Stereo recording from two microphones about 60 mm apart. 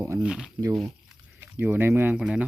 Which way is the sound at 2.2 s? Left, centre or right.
Centre.